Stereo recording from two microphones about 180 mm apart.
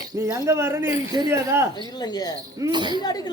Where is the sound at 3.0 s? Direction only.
20° left (ahead or behind).